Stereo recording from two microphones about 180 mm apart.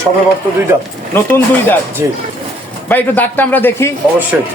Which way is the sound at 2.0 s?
15° right (ahead or behind).